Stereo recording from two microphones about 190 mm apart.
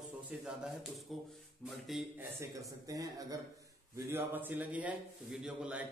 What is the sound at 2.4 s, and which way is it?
A man's voice, 15° right (ahead or behind).